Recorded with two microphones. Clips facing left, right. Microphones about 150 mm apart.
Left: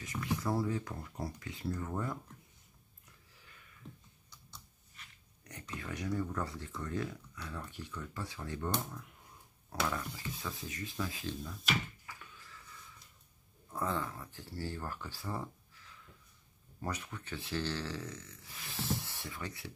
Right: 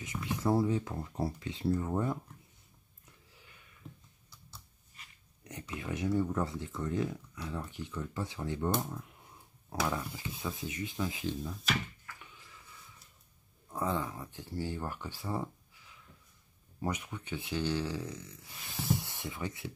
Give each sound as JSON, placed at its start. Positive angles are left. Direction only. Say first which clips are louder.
{"t": 0.0, "sound": "speech", "louder": "right 3 dB", "side_deg": -20}
{"t": 3.8, "sound": "computer keyboard", "louder": "right 1 dB", "side_deg": -5}
{"t": 5.8, "sound": "speech", "louder": "right 5 dB", "side_deg": -20}
{"t": 9.8, "sound": "speech", "louder": "right 2 dB", "side_deg": -15}
{"t": 11.5, "sound": "speech", "louder": "right 1 dB", "side_deg": 0}
{"t": 12.2, "sound": "a sound", "louder": "even", "side_deg": -20}
{"t": 13.7, "sound": "speech", "louder": "right 2 dB", "side_deg": -15}